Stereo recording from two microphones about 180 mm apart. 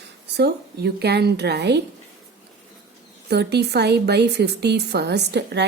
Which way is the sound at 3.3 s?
65° right (ahead or behind).